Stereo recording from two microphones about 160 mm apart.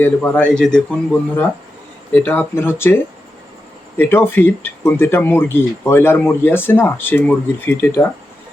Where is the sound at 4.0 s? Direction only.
15° left (ahead or behind).